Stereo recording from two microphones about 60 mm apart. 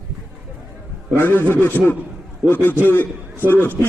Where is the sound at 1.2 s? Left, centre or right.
Left.